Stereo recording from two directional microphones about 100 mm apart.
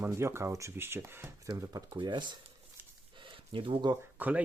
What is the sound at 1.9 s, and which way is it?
Speech, 50° right (ahead or behind).